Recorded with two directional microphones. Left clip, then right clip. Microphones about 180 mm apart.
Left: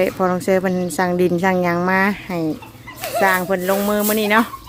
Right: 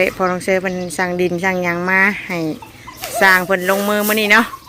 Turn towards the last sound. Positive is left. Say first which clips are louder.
# right 4 dB
turn(degrees=15)  # may be behind; listen again after turning